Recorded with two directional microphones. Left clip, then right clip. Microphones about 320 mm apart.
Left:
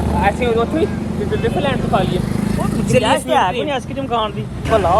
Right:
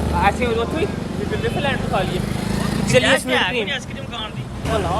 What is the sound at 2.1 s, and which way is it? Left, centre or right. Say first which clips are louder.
Speech: left 3 dB; centre.